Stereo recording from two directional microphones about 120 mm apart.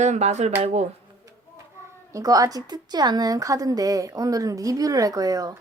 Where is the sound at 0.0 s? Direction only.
70° right (ahead or behind).